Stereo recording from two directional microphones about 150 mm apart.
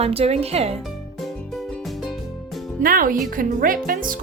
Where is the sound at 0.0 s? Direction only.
40° right (ahead or behind).